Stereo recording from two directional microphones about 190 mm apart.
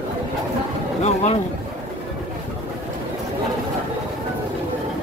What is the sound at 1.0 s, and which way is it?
Speech, 35° left (ahead or behind).